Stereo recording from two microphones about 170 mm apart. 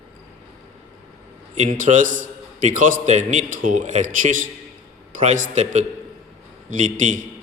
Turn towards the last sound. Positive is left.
turn(degrees=-50)  # may be behind; listen again after turning